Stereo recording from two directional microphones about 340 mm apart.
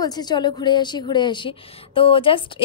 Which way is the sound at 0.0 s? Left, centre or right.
Centre.